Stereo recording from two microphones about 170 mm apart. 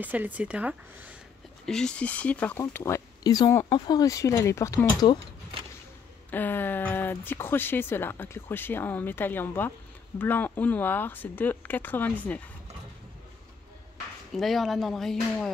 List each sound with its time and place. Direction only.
0.0 s speech: 10° right (ahead or behind)
1.7 s speech: 5° left (ahead or behind); by 5.2 s 20° left (ahead or behind)
6.3 s speech: 10° left (ahead or behind)
14.3 s speech: centre (ahead or behind)